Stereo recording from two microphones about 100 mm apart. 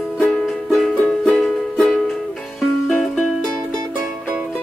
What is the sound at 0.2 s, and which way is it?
Music, 5° left (ahead or behind).